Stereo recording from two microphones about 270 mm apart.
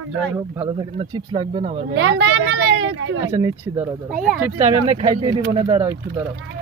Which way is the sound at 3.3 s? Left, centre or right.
Centre.